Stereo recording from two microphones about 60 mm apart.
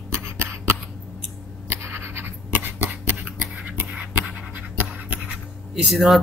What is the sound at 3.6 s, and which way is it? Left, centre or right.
Scratch, right.